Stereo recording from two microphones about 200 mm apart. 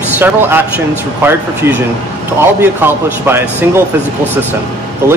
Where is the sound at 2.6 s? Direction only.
10° right (ahead or behind).